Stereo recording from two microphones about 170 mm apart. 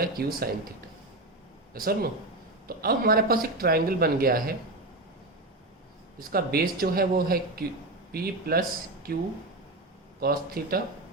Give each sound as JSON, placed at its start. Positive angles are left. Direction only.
{"t": 0.0, "sound": "speech", "side_deg": -60}
{"t": 1.7, "sound": "speech", "side_deg": -60}
{"t": 6.1, "sound": "speech", "side_deg": -65}